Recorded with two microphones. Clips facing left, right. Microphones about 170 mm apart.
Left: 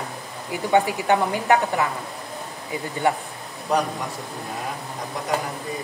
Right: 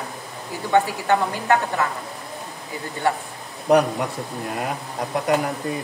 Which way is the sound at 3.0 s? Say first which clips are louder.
Even; 15° left (ahead or behind).